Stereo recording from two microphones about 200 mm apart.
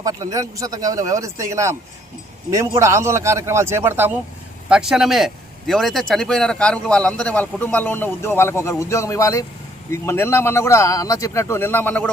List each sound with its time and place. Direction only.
0.0 s speech: 15° right (ahead or behind); by 12.1 s 10° left (ahead or behind)